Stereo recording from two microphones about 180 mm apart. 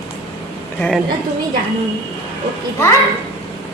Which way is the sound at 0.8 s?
5° left (ahead or behind).